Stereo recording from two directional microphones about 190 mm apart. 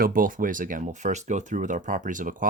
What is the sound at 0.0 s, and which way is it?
Speech, 45° right (ahead or behind).